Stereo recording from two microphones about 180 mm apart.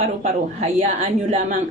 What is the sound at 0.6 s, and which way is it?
Speech, 40° right (ahead or behind).